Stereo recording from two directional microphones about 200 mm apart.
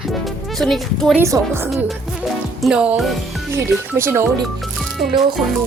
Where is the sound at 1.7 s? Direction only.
Centre (ahead or behind).